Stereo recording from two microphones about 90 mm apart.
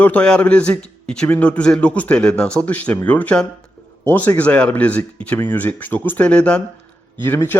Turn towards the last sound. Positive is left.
turn(degrees=25)  # may be behind; listen again after turning